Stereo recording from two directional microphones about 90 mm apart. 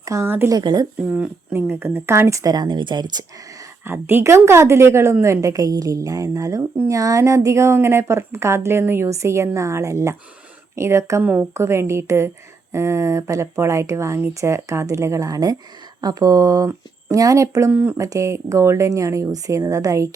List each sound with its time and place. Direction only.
0.0 s speech: 35° right (ahead or behind)
0.5 s speech: 50° right (ahead or behind)
1.1 s speech: 10° right (ahead or behind)
1.5 s speech: 25° right (ahead or behind); by 3.7 s 50° right (ahead or behind)
3.8 s speech: 25° right (ahead or behind)
11.2 s a woman's voice: 20° right (ahead or behind)
11.5 s speech: 30° right (ahead or behind)
17.7 s a woman's voice: 20° right (ahead or behind)
17.9 s speech: 40° right (ahead or behind)